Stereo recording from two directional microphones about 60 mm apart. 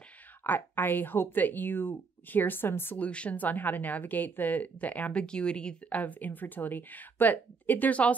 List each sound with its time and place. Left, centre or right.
0.4 s speech: left
3.0 s a woman's voice: left
5.9 s a woman's voice: left